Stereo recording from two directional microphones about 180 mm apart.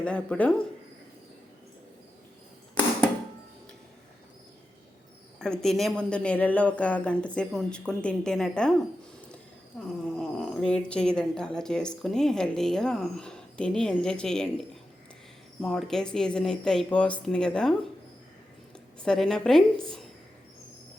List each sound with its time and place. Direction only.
0.0 s speech: 5° left (ahead or behind)
5.4 s speech: 5° left (ahead or behind)
9.8 s speech: centre (ahead or behind)
15.6 s speech: centre (ahead or behind)
19.0 s speech: 5° left (ahead or behind)